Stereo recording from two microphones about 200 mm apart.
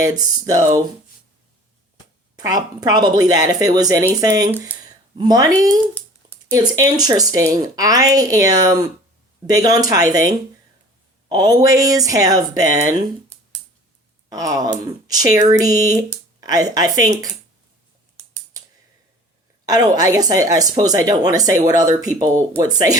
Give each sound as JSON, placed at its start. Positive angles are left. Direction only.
{"t": 0.0, "sound": "speech", "side_deg": -20}
{"t": 2.3, "sound": "speech", "side_deg": -20}
{"t": 11.3, "sound": "speech", "side_deg": -20}
{"t": 14.3, "sound": "speech", "side_deg": -20}
{"t": 19.6, "sound": "speech", "side_deg": -20}